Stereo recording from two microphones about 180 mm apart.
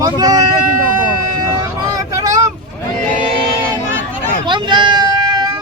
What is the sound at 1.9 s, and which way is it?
Vehicle, 20° right (ahead or behind).